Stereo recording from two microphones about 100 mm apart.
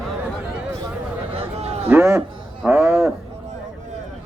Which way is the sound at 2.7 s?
25° right (ahead or behind).